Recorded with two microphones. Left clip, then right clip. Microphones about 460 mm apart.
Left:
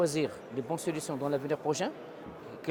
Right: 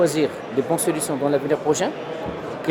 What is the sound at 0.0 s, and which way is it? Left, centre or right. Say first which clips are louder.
Speech: right 10 dB; left.